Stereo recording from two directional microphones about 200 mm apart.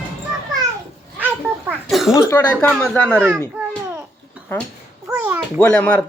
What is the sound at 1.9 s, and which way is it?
Speech, centre (ahead or behind).